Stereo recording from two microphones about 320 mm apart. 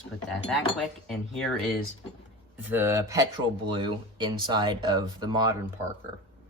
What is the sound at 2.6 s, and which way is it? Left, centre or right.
Speech, centre.